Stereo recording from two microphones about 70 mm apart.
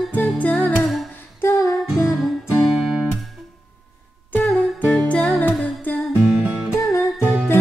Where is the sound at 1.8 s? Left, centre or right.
Centre.